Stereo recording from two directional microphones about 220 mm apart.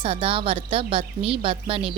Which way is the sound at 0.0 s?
25° right (ahead or behind).